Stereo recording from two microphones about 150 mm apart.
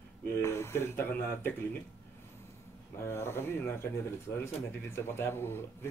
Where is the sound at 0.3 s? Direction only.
20° left (ahead or behind).